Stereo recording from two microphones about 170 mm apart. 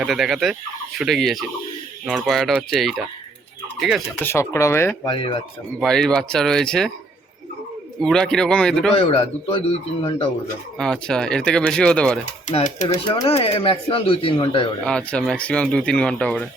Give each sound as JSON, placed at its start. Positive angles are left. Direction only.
{"t": 0.0, "sound": "speech", "side_deg": 0}
{"t": 4.2, "sound": "speech", "side_deg": 15}
{"t": 5.0, "sound": "speech", "side_deg": 30}
{"t": 5.8, "sound": "speech", "side_deg": 5}
{"t": 8.0, "sound": "speech", "side_deg": 5}
{"t": 9.0, "sound": "speech", "side_deg": 35}
{"t": 10.8, "sound": "speech", "side_deg": 5}
{"t": 12.5, "sound": "speech", "side_deg": 45}
{"t": 13.2, "sound": "speech", "side_deg": 35}
{"t": 14.8, "sound": "speech", "side_deg": 5}